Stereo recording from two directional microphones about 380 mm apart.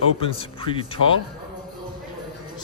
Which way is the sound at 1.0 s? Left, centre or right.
Right.